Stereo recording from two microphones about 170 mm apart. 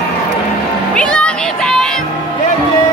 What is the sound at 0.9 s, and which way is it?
Music, 5° left (ahead or behind).